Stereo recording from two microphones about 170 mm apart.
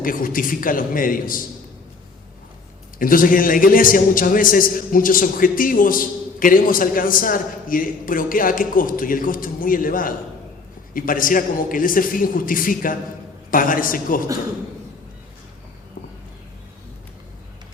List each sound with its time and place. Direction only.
0.0 s a man's voice: 55° left (ahead or behind)
3.0 s a man's voice: 55° left (ahead or behind)